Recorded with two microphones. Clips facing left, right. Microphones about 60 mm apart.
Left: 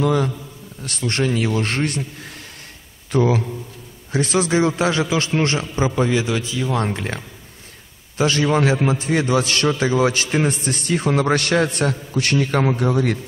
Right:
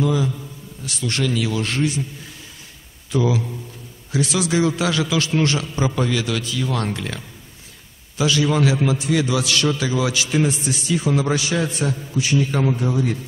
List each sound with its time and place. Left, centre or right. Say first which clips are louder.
0.0 s a man's voice: left 2 dB; left
0.8 s a man's voice: left 2 dB; left
3.1 s a man's voice: left 2 dB; left
8.2 s a man's voice: left 1 dB; left